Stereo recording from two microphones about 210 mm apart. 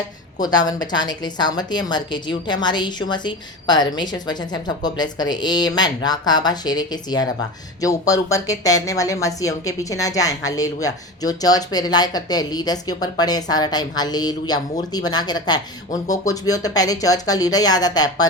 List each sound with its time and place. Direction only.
0.4 s a woman's voice: 20° left (ahead or behind)